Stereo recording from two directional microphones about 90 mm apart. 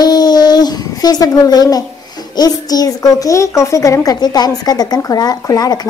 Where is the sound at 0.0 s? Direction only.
50° left (ahead or behind).